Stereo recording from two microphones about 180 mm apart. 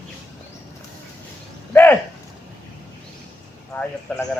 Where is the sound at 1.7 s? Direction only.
10° left (ahead or behind).